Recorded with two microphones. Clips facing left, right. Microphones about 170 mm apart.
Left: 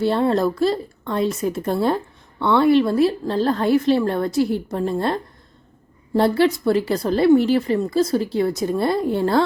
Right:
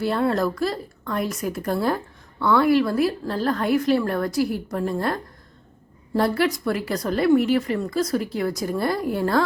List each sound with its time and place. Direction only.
0.0 s a woman's voice: 25° left (ahead or behind)